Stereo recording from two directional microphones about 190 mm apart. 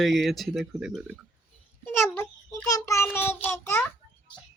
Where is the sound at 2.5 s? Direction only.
15° left (ahead or behind).